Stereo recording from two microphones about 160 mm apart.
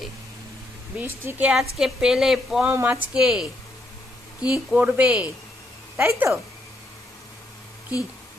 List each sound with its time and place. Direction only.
0.9 s a woman's voice: 10° right (ahead or behind)
2.7 s speech: 15° right (ahead or behind)
3.2 s a woman's voice: 5° right (ahead or behind)
4.5 s speech: 10° right (ahead or behind)
7.9 s speech: 20° left (ahead or behind)